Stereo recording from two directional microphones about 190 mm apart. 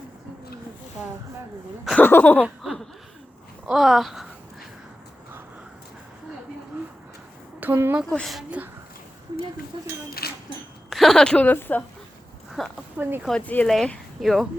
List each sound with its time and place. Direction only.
1.8 s speech: centre (ahead or behind)
2.0 s a sound: 10° left (ahead or behind)
2.4 s a sound: centre (ahead or behind)
7.6 s speech: 10° right (ahead or behind)
8.1 s speech: centre (ahead or behind)
10.2 s a sound: 55° left (ahead or behind)
10.8 s a woman's voice: centre (ahead or behind)
12.6 s speech: centre (ahead or behind)
13.0 s speech: 10° right (ahead or behind)
13.2 s speech: 5° left (ahead or behind)